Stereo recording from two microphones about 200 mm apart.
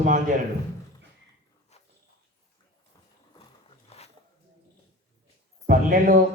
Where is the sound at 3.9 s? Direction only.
30° left (ahead or behind).